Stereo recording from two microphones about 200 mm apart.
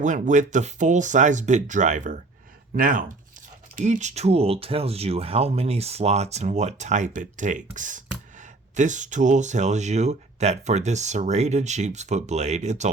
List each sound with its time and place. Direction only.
0.0 s speech: 40° right (ahead or behind)